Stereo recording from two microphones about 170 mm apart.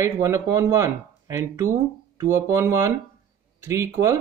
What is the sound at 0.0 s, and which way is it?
Speech, 15° right (ahead or behind).